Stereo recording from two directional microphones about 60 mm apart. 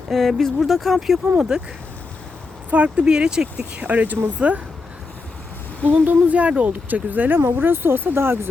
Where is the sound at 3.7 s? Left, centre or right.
Right.